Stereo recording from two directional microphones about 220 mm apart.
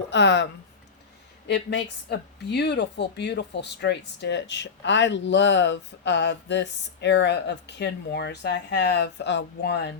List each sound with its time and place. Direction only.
0.1 s speech: 55° left (ahead or behind)
1.5 s speech: 50° left (ahead or behind)